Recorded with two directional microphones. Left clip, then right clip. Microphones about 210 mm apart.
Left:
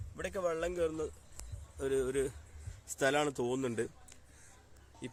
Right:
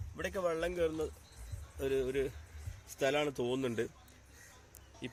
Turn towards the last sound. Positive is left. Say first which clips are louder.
# right 1 dB
turn(degrees=5)  # may be behind; listen again after turning